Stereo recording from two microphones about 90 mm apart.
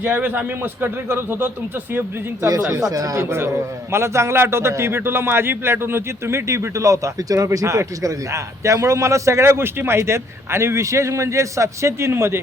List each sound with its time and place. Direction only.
0.0 s a man's voice: 20° right (ahead or behind)
2.8 s a man's voice: 40° right (ahead or behind)
3.2 s a man's voice: 25° right (ahead or behind)